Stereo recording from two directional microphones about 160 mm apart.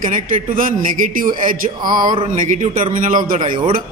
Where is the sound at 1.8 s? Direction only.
25° right (ahead or behind).